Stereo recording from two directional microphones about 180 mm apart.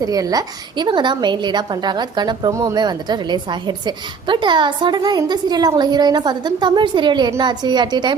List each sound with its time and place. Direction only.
0.0 s a woman's voice: 20° right (ahead or behind)